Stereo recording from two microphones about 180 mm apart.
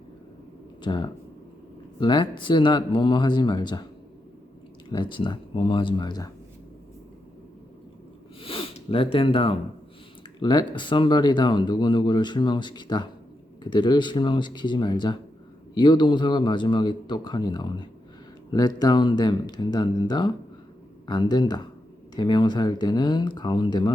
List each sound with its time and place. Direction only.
0.8 s speech: 25° left (ahead or behind)
4.9 s speech: 25° left (ahead or behind)
8.4 s speech: 30° left (ahead or behind)